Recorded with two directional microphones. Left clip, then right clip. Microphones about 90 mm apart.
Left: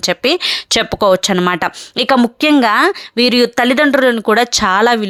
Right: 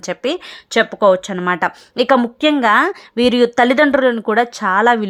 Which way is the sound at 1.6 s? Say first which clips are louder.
Even; 20° left (ahead or behind).